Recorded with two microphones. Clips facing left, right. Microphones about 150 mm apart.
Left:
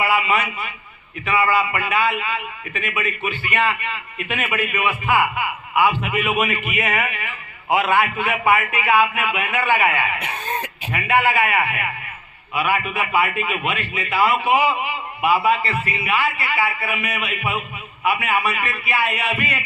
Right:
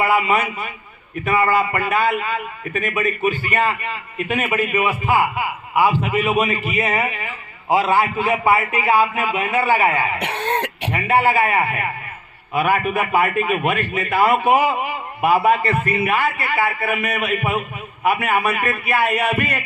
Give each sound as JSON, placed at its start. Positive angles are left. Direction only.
{"t": 0.0, "sound": "a man's voice", "side_deg": -45}
{"t": 10.2, "sound": "speech", "side_deg": -75}
{"t": 10.9, "sound": "a man's voice", "side_deg": -35}